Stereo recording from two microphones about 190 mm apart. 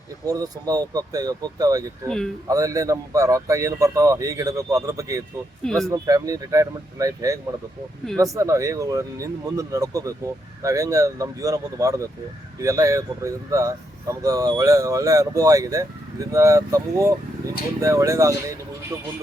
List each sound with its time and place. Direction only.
0.3 s speech: 20° right (ahead or behind)
2.0 s speech: 5° left (ahead or behind)
2.5 s speech: 15° right (ahead or behind)
5.6 s speech: centre (ahead or behind)
5.9 s speech: 20° right (ahead or behind)